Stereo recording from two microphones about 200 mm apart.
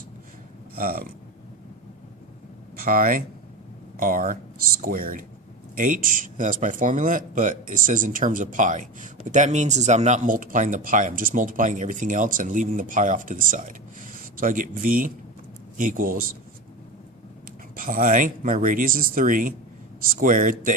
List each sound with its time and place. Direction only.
0.8 s speech: 45° right (ahead or behind)
2.7 s speech: 45° right (ahead or behind)
17.7 s speech: 40° right (ahead or behind)